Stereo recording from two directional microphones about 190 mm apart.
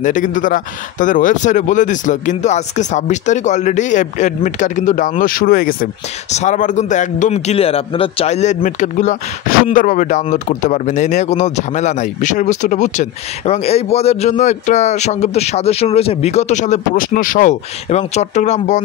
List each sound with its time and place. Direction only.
0.0 s a man's voice: 40° left (ahead or behind)
6.3 s a man's voice: 40° left (ahead or behind)